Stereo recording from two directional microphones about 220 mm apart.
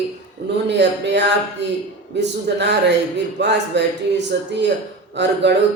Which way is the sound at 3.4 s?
50° right (ahead or behind).